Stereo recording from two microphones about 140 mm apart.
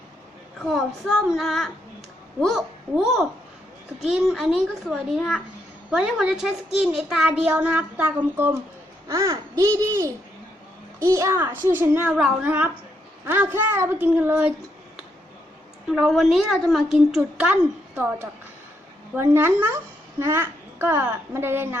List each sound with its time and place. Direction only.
0.6 s a woman's voice: centre (ahead or behind)
15.9 s a woman's voice: centre (ahead or behind)